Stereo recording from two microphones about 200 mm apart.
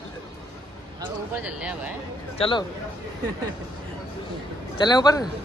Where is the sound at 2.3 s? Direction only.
25° left (ahead or behind).